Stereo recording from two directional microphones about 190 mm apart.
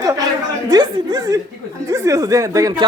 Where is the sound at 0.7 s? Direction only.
20° right (ahead or behind).